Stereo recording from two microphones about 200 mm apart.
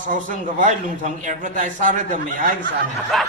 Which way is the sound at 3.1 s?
Centre (ahead or behind).